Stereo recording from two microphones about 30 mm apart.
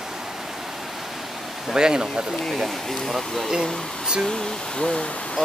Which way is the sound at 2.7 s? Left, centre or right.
Centre.